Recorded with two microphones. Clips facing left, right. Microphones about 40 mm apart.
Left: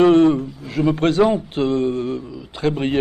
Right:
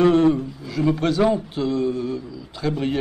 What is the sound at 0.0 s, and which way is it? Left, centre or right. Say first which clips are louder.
A man's voice: left 3 dB; left.